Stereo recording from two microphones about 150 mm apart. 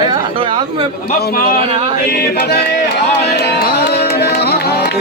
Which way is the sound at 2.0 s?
90° left.